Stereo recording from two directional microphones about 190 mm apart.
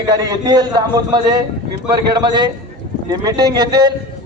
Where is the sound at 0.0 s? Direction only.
20° right (ahead or behind).